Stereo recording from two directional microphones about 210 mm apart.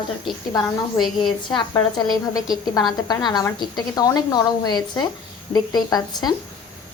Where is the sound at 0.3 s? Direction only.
Centre (ahead or behind).